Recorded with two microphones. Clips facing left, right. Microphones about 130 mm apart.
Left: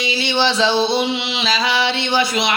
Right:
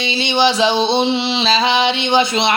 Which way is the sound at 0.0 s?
25° right (ahead or behind).